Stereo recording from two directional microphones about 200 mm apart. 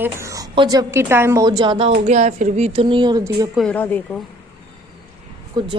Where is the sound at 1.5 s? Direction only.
25° right (ahead or behind).